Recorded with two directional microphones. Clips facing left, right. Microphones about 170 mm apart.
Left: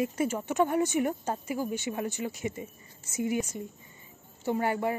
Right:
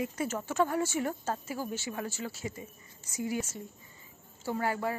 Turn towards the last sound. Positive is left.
turn(degrees=20)  # may be behind; listen again after turning